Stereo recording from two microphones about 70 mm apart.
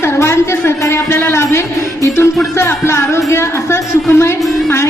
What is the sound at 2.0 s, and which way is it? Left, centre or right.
Music, left.